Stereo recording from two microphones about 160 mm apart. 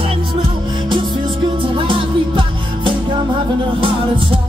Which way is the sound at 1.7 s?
35° right (ahead or behind).